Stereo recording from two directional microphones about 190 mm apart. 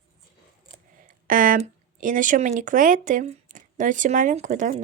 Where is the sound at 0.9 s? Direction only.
45° right (ahead or behind).